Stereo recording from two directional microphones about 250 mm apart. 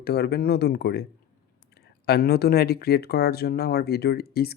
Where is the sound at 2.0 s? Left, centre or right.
Left.